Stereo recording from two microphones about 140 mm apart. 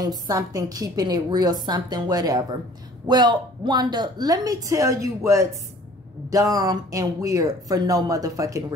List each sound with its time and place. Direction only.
0.0 s a woman's voice: 25° right (ahead or behind)